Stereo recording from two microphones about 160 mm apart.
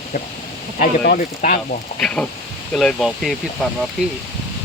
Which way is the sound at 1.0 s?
55° left (ahead or behind).